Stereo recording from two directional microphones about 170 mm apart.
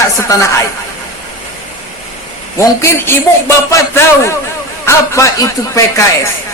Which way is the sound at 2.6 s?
15° left (ahead or behind).